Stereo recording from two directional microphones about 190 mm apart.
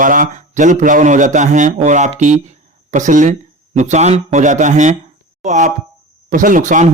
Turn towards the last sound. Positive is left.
turn(degrees=-40)  # may be behind; listen again after turning